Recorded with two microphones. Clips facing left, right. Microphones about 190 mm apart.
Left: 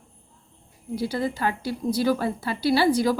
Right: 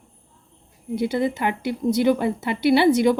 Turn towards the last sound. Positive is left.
turn(degrees=-20)  # may be behind; listen again after turning